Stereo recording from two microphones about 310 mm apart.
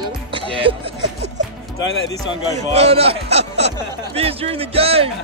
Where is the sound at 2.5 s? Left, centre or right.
Right.